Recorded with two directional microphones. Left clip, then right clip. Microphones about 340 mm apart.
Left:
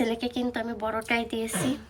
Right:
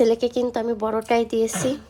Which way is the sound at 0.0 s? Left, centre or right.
Centre.